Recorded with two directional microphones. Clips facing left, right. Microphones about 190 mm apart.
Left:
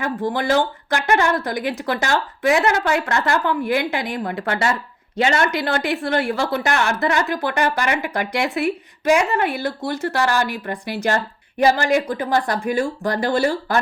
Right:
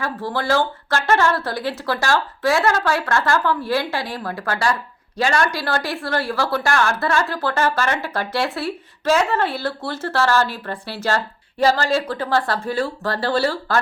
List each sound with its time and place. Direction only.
0.0 s a woman's voice: 20° left (ahead or behind)